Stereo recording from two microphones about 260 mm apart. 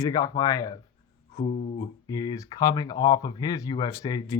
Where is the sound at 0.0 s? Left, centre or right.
Centre.